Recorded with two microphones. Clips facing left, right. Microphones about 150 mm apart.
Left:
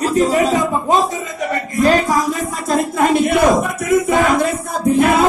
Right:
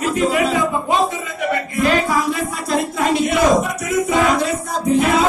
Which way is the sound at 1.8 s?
40° left (ahead or behind).